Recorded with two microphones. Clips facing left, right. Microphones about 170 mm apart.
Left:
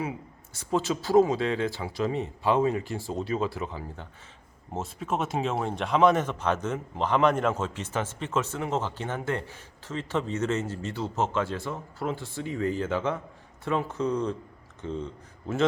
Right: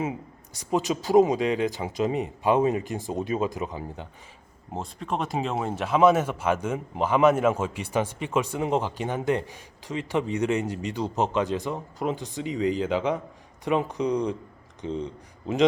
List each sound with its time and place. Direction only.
0.0 s speech: 20° right (ahead or behind)
4.7 s speech: 5° left (ahead or behind); by 15.6 s 15° right (ahead or behind)